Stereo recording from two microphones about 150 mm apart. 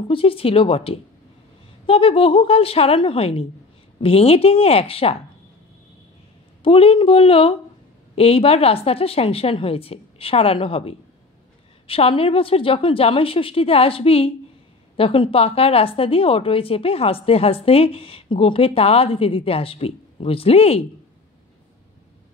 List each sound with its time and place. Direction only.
0.1 s speech: 40° left (ahead or behind)
6.6 s speech: 40° left (ahead or behind)